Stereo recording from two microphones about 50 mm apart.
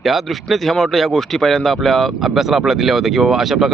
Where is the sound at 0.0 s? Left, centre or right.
Centre.